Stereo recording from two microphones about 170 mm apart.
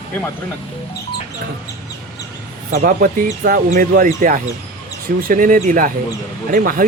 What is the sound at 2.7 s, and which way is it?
Speech, 55° right (ahead or behind).